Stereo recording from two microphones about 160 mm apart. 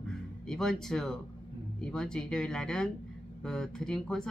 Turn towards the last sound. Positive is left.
turn(degrees=5)  # may be behind; listen again after turning